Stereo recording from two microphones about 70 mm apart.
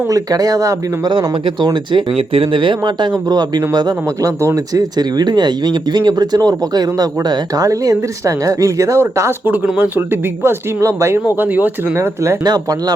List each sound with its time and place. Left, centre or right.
0.1 s speech: right
2.8 s a man's voice: right
4.4 s speech: right
9.7 s speech: right
10.8 s speech: right
11.3 s speech: right
11.9 s speech: right